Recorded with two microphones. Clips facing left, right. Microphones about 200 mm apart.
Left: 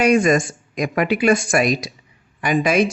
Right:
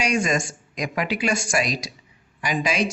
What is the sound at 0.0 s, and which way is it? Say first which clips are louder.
Speech: left 8 dB; 55° left (ahead or behind).